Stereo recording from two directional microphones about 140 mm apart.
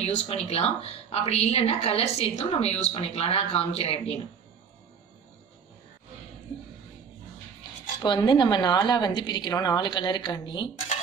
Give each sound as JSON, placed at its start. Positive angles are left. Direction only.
{"t": 0.0, "sound": "a woman's voice", "side_deg": 50}
{"t": 8.0, "sound": "a woman's voice", "side_deg": 30}